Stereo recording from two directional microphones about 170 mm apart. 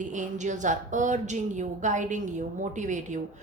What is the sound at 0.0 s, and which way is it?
A woman's voice, 45° right (ahead or behind).